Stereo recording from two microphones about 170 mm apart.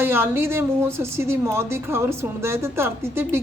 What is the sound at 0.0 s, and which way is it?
A woman's voice, 15° right (ahead or behind).